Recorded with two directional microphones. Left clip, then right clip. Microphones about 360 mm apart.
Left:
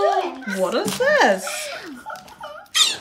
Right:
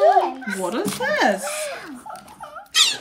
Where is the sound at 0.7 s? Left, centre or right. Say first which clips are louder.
Left 4 dB; centre.